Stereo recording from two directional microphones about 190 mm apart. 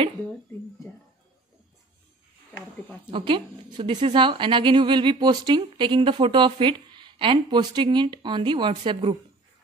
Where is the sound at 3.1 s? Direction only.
25° right (ahead or behind).